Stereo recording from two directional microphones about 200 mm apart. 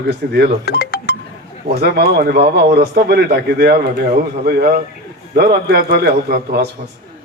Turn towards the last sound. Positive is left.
turn(degrees=-55)  # may be behind; listen again after turning